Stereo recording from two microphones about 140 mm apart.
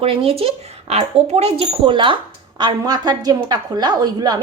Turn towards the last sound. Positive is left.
turn(degrees=-30)  # may be behind; listen again after turning